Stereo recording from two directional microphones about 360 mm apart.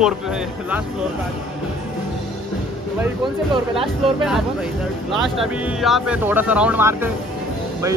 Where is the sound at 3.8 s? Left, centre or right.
Centre.